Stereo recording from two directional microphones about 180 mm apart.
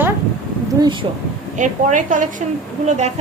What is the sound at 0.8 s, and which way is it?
Speech, 25° right (ahead or behind).